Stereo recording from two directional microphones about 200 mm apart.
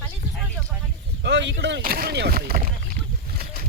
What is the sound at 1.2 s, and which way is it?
Speech, 65° right (ahead or behind).